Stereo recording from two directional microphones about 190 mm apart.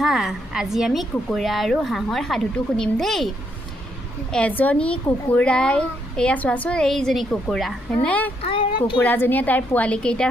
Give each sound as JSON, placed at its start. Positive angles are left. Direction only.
{"t": 0.0, "sound": "a woman's voice", "side_deg": 0}
{"t": 4.3, "sound": "a woman's voice", "side_deg": 5}
{"t": 8.4, "sound": "speech", "side_deg": 30}
{"t": 9.0, "sound": "a woman's voice", "side_deg": 10}